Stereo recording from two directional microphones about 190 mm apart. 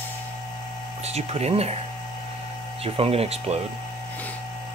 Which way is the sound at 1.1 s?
35° right (ahead or behind).